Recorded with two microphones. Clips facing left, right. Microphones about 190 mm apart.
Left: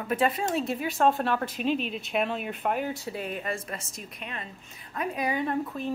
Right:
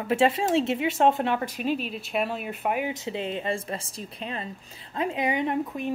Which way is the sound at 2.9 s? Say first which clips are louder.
Right 3 dB; 20° right (ahead or behind).